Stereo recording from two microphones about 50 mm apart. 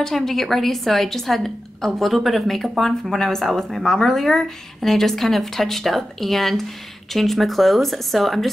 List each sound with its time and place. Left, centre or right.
0.0 s speech: centre